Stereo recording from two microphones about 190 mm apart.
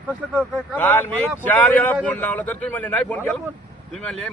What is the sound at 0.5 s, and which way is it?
A man's voice, 5° left (ahead or behind).